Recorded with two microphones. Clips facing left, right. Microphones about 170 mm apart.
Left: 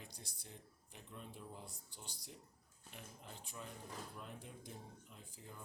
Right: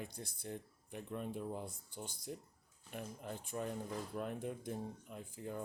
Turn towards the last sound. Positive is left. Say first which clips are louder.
# right 12 dB
turn(degrees=-55)  # may be behind; listen again after turning